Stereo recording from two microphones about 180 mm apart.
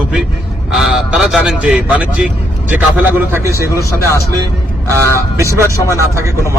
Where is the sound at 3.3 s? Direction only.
15° right (ahead or behind).